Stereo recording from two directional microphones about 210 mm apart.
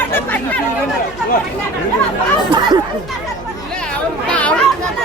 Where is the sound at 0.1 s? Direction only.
10° left (ahead or behind).